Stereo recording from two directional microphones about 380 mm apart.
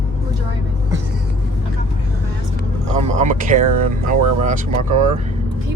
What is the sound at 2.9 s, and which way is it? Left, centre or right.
Speech, centre.